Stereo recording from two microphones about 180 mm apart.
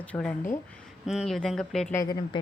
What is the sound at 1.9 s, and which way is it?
Speech, 20° left (ahead or behind).